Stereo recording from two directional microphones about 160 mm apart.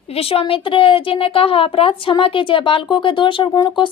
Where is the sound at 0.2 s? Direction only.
35° left (ahead or behind).